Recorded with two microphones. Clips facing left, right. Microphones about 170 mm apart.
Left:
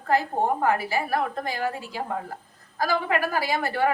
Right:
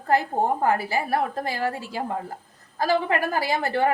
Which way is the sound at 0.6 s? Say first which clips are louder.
Right 1 dB; 35° right (ahead or behind).